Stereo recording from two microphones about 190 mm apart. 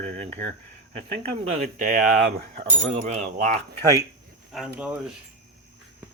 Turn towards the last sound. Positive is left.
turn(degrees=-5)  # may be behind; listen again after turning